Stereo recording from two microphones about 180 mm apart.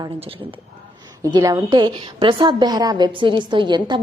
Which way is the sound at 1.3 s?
20° right (ahead or behind).